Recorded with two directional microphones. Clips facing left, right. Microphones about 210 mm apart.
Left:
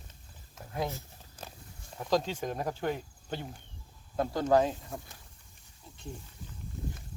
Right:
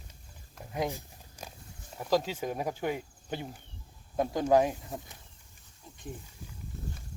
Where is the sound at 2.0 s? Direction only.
10° right (ahead or behind).